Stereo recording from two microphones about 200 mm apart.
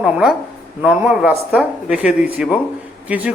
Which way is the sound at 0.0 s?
Centre (ahead or behind).